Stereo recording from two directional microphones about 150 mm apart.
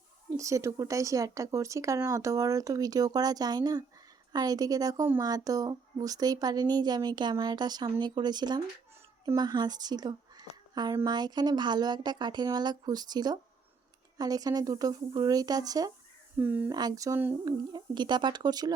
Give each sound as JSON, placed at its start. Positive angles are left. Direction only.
{"t": 0.3, "sound": "a woman's voice", "side_deg": -20}
{"t": 16.4, "sound": "speech", "side_deg": -15}
{"t": 16.7, "sound": "speech", "side_deg": -25}
{"t": 17.4, "sound": "speech", "side_deg": -30}